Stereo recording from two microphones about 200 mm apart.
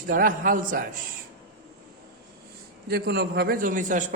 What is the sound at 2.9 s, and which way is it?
A man's voice, 50° right (ahead or behind).